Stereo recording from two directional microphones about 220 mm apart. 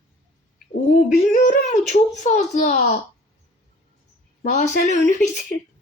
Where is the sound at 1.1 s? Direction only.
35° left (ahead or behind).